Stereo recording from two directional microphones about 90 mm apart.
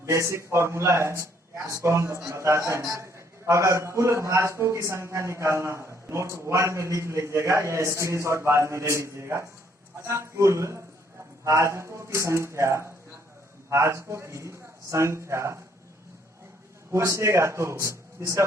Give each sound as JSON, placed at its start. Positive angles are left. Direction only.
{"t": 0.0, "sound": "a man's voice", "side_deg": -35}
{"t": 16.9, "sound": "a man's voice", "side_deg": -30}